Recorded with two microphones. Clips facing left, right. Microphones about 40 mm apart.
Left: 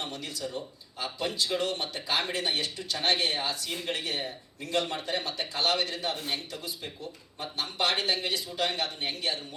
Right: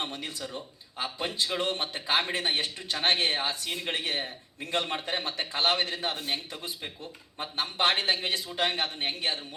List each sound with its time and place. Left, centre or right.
0.0 s a man's voice: right